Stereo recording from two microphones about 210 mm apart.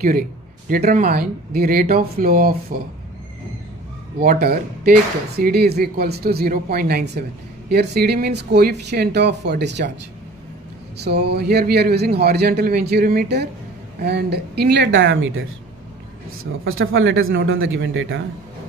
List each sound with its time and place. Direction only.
0.7 s a man's voice: 40° right (ahead or behind)
4.2 s a man's voice: 45° right (ahead or behind)
11.0 s a man's voice: 50° right (ahead or behind)
16.6 s speech: 70° right (ahead or behind)